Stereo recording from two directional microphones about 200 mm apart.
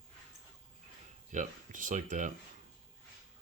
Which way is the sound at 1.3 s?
40° right (ahead or behind).